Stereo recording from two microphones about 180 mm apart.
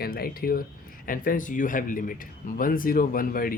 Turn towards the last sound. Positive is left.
turn(degrees=55)  # may be behind; listen again after turning